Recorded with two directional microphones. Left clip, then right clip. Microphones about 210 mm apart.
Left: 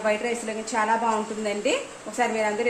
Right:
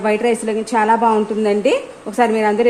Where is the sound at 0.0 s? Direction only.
50° right (ahead or behind).